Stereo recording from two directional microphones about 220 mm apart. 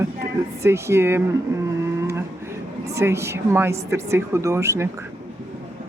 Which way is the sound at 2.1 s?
10° right (ahead or behind).